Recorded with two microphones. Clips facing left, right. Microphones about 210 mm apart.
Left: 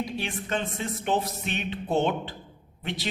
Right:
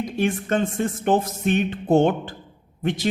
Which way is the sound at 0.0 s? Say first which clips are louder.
Right 8 dB; 45° right (ahead or behind).